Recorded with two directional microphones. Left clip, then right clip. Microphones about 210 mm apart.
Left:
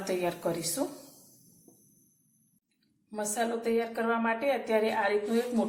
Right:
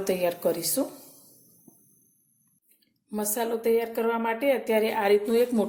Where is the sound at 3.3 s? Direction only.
50° right (ahead or behind).